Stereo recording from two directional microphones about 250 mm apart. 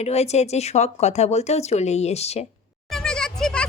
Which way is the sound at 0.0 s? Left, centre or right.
Left.